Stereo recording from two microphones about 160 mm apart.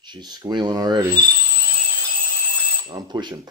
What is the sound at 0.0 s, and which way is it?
Speech, 25° right (ahead or behind).